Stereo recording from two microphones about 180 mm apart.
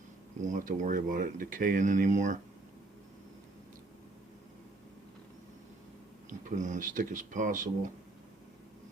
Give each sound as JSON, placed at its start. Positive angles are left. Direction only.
{"t": 0.4, "sound": "speech", "side_deg": -45}
{"t": 6.4, "sound": "speech", "side_deg": -45}